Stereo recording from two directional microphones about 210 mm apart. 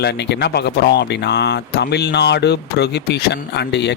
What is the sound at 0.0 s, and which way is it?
Speech, 50° left (ahead or behind).